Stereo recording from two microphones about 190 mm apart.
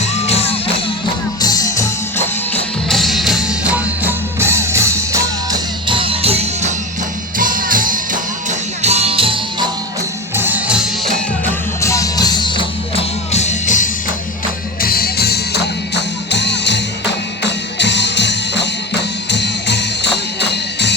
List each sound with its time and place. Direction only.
0.0 s music: 35° left (ahead or behind)
1.4 s music: 20° left (ahead or behind)
2.9 s music: centre (ahead or behind); by 6.7 s 35° right (ahead or behind)
7.3 s music: 45° right (ahead or behind); by 9.6 s 30° right (ahead or behind)
10.3 s music: 10° right (ahead or behind)
11.8 s music: 15° left (ahead or behind); by 13.9 s 40° left (ahead or behind)
14.8 s music: 50° left (ahead or behind)